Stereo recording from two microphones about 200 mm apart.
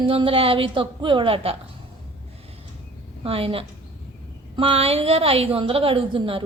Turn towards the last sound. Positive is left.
turn(degrees=-25)  # may be behind; listen again after turning